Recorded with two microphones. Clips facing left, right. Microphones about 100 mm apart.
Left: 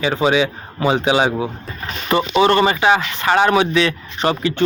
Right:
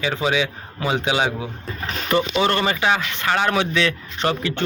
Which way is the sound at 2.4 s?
15° left (ahead or behind).